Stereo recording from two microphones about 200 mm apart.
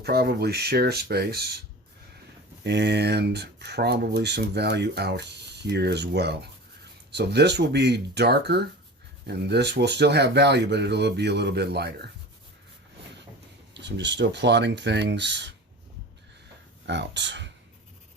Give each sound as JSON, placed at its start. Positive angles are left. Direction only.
{"t": 0.0, "sound": "speech", "side_deg": -50}
{"t": 2.6, "sound": "speech", "side_deg": -60}
{"t": 13.8, "sound": "speech", "side_deg": -60}
{"t": 16.8, "sound": "speech", "side_deg": -60}